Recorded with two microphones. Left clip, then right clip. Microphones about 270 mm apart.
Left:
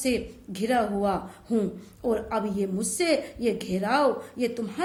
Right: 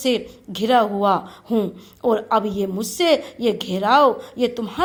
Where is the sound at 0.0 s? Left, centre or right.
Right.